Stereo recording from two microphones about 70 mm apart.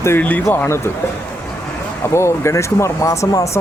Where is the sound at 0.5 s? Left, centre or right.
Left.